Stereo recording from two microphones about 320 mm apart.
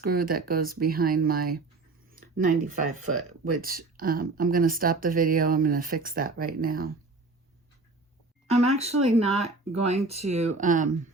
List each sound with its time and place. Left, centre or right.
0.0 s speech: right
8.4 s speech: centre